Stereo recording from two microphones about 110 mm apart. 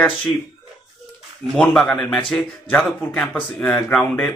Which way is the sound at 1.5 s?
5° left (ahead or behind).